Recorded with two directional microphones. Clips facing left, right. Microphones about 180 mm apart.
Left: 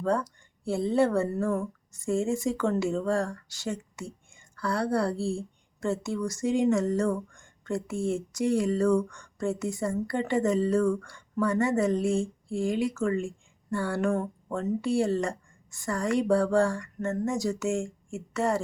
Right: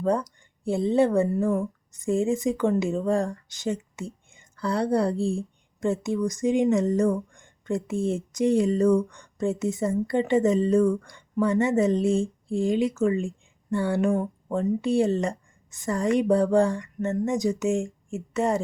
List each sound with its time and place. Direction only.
0.0 s speech: 15° right (ahead or behind)